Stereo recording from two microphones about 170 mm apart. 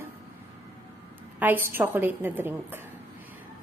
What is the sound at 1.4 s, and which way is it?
A woman's voice, 10° right (ahead or behind).